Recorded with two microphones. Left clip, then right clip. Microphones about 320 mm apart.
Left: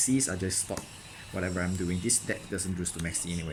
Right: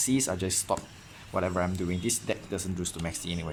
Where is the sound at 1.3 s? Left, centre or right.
Right.